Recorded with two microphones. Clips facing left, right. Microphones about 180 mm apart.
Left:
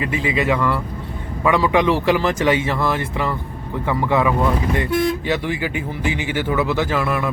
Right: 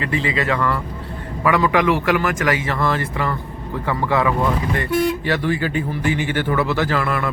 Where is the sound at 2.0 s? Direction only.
25° left (ahead or behind).